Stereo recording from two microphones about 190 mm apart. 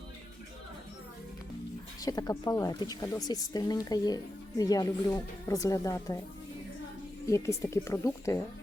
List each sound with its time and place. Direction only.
2.0 s speech: 20° left (ahead or behind)
7.3 s speech: 15° left (ahead or behind)